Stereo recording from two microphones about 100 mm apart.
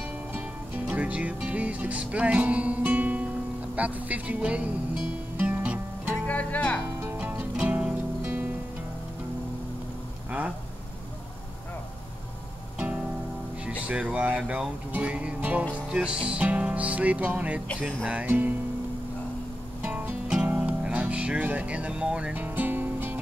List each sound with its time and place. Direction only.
0.3 s music: 15° right (ahead or behind)
6.2 s speech: 15° left (ahead or behind)
7.0 s music: 20° right (ahead or behind)
12.7 s music: 10° right (ahead or behind)
19.8 s music: 20° right (ahead or behind)